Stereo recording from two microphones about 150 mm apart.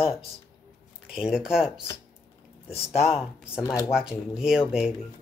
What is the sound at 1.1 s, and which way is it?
Speech, 5° right (ahead or behind).